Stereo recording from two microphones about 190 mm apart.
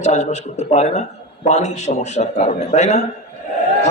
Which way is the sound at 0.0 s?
35° left (ahead or behind).